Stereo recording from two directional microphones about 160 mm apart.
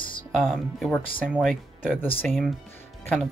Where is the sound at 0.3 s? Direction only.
Centre (ahead or behind).